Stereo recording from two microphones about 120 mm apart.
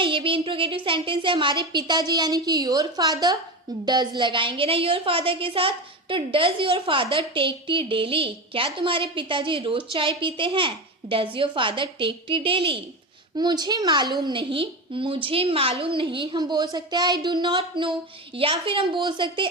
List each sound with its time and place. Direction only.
0.0 s a sound: 45° right (ahead or behind)
0.9 s a woman's voice: 45° right (ahead or behind)
13.3 s a woman's voice: 35° right (ahead or behind)